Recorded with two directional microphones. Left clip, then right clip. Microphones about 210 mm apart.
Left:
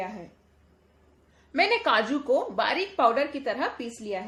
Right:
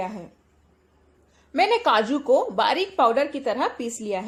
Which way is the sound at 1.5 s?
20° right (ahead or behind).